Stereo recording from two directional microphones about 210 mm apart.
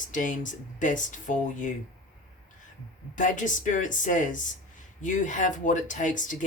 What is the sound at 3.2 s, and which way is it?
Speech, 35° left (ahead or behind).